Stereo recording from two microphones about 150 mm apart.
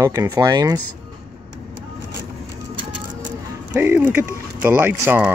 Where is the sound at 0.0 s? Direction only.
20° right (ahead or behind).